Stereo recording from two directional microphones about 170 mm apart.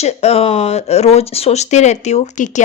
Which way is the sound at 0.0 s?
40° left (ahead or behind).